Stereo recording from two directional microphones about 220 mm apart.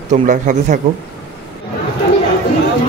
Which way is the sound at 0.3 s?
35° right (ahead or behind).